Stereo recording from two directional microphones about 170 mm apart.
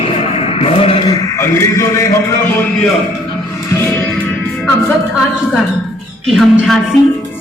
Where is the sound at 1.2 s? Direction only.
15° left (ahead or behind).